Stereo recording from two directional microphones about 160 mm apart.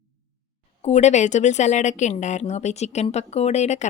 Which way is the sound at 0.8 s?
45° left (ahead or behind).